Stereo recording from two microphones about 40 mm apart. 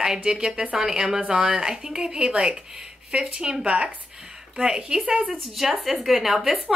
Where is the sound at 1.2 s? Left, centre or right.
Right.